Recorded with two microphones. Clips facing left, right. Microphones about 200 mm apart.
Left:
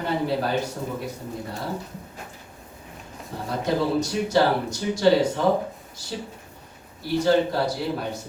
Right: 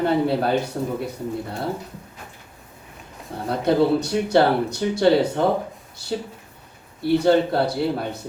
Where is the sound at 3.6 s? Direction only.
60° right (ahead or behind).